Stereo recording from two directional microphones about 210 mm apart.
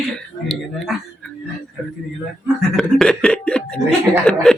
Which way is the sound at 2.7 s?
Centre (ahead or behind).